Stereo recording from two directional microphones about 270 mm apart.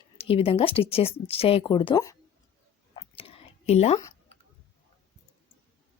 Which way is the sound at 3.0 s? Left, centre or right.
Centre.